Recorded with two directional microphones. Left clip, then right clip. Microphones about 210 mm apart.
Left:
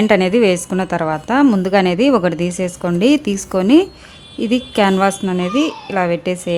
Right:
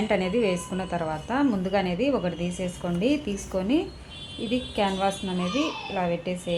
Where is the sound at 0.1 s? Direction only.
50° left (ahead or behind).